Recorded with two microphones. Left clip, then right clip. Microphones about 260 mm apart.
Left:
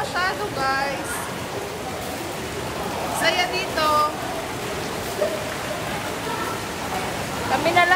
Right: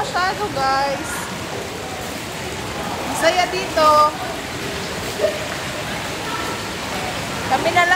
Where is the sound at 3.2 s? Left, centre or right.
Centre.